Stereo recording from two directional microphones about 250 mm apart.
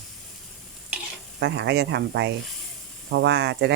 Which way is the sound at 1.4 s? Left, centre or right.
Right.